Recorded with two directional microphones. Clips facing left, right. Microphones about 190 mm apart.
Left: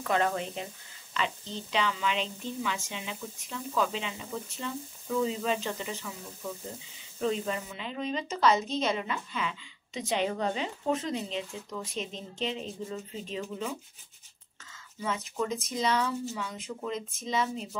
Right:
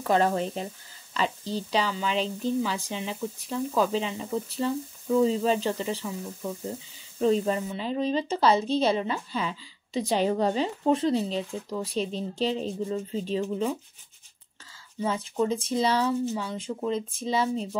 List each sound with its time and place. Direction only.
0.0 s a woman's voice: 35° right (ahead or behind)
7.2 s a woman's voice: 35° right (ahead or behind)
15.0 s a woman's voice: 30° right (ahead or behind)